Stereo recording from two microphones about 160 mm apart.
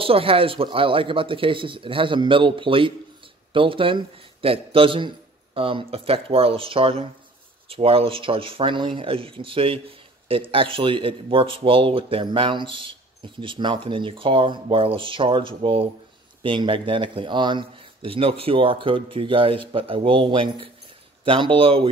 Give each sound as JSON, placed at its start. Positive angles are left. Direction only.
{"t": 0.0, "sound": "speech", "side_deg": -35}